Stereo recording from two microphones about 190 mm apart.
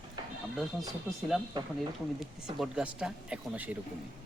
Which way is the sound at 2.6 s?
5° right (ahead or behind).